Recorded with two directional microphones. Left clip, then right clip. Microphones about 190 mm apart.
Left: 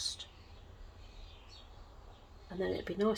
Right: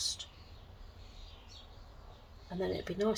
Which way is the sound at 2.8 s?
25° left (ahead or behind).